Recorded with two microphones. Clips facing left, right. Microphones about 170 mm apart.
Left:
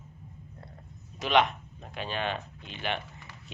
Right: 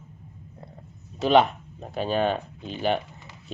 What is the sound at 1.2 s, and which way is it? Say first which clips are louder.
Speech: right 6 dB; 35° right (ahead or behind).